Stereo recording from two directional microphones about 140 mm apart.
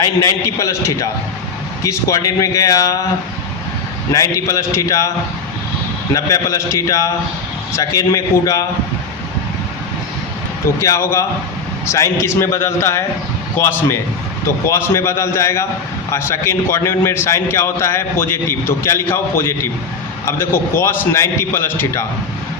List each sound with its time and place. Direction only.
0.0 s a man's voice: 25° left (ahead or behind)
4.1 s a man's voice: 25° left (ahead or behind)
6.1 s a man's voice: 25° left (ahead or behind)
10.8 s a man's voice: 20° left (ahead or behind)